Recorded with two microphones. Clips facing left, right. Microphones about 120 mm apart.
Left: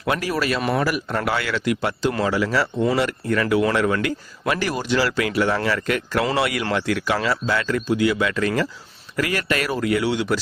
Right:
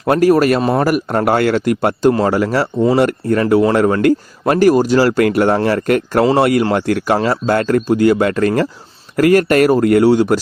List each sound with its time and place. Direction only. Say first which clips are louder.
0.0 s speech: right 12 dB; 45° right (ahead or behind)